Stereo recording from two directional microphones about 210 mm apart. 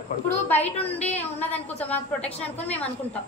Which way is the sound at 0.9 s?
5° left (ahead or behind).